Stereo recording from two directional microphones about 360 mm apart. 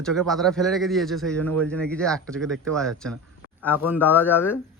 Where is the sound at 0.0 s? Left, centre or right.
Centre.